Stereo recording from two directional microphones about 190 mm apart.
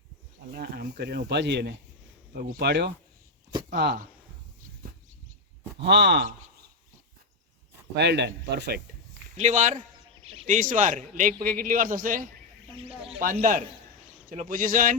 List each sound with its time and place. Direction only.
0.5 s speech: 50° right (ahead or behind)
2.3 s speech: 50° right (ahead or behind)
5.8 s speech: 60° right (ahead or behind)
7.9 s speech: 65° right (ahead or behind)
9.4 s speech: 40° right (ahead or behind)
12.7 s speech: 30° right (ahead or behind)